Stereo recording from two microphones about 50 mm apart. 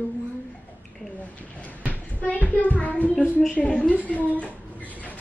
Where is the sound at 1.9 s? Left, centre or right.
Left.